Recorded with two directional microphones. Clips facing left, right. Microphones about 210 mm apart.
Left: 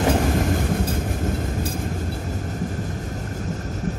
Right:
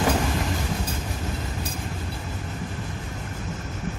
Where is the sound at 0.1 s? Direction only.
45° left (ahead or behind).